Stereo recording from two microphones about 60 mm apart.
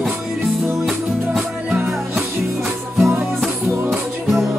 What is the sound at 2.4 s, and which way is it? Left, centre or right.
Music, right.